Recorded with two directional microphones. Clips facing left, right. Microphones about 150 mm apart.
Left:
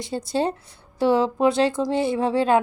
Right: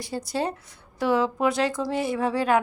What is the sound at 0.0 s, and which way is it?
Speech, 25° left (ahead or behind).